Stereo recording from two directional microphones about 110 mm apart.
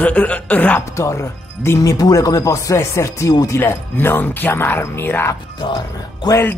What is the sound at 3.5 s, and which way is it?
Speech, 20° left (ahead or behind).